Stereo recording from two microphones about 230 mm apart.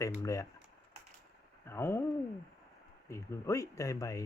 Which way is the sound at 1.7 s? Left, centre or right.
Centre.